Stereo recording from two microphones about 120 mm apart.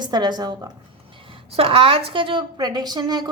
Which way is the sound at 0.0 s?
35° right (ahead or behind).